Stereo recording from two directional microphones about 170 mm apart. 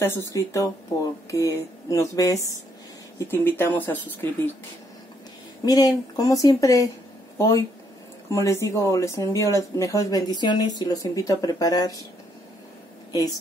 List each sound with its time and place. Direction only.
0.0 s speech: 15° left (ahead or behind)
5.7 s speech: 20° left (ahead or behind)